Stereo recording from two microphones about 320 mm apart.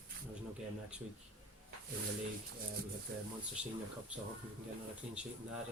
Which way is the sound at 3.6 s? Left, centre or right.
Centre.